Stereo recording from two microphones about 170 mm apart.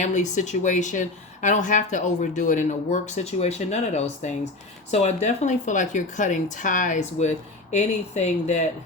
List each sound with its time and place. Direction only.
0.0 s speech: 45° left (ahead or behind)